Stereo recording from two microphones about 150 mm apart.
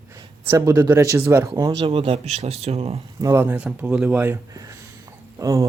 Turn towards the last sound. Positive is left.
turn(degrees=-20)  # may be behind; listen again after turning